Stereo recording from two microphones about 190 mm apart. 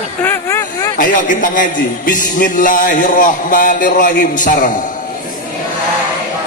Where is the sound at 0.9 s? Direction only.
45° left (ahead or behind).